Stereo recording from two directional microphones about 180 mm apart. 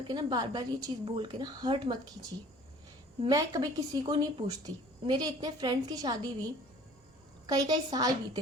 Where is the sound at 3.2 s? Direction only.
20° right (ahead or behind).